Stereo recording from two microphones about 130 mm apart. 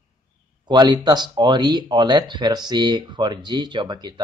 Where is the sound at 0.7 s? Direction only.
30° right (ahead or behind).